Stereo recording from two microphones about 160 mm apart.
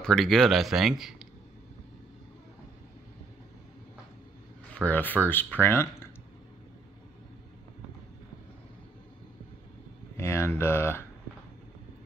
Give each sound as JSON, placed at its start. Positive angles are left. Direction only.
{"t": 0.0, "sound": "speech", "side_deg": 5}
{"t": 4.7, "sound": "speech", "side_deg": 10}
{"t": 10.1, "sound": "speech", "side_deg": 15}